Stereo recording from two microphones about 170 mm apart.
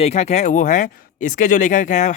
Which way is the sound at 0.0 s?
40° left (ahead or behind).